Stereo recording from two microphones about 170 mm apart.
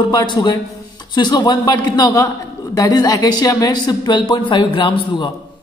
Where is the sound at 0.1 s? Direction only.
25° left (ahead or behind).